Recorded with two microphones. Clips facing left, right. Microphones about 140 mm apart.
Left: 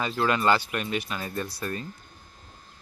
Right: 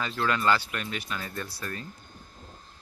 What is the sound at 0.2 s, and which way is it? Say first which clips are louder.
Speech: left 2 dB; 20° left (ahead or behind).